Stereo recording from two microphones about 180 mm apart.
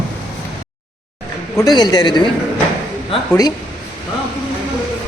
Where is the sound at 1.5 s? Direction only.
20° left (ahead or behind).